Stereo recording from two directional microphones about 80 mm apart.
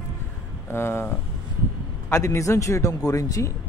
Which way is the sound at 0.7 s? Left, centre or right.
Left.